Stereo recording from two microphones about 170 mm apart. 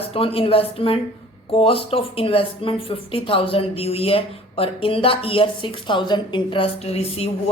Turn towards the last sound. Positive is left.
turn(degrees=35)  # may be behind; listen again after turning